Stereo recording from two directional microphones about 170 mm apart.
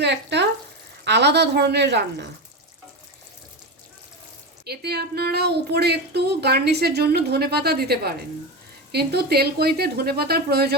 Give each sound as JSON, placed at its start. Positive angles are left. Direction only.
{"t": 0.0, "sound": "frying", "side_deg": -90}
{"t": 1.0, "sound": "a woman's voice", "side_deg": -85}
{"t": 4.6, "sound": "a woman's voice", "side_deg": -70}